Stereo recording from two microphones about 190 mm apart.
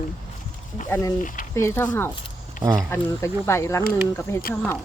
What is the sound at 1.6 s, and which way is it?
Speech, 15° left (ahead or behind).